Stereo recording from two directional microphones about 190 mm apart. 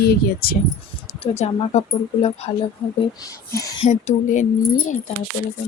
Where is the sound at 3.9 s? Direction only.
40° left (ahead or behind).